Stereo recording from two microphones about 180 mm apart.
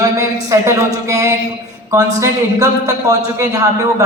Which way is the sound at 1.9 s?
15° right (ahead or behind).